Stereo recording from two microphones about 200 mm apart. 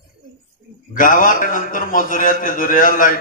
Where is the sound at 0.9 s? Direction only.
40° left (ahead or behind).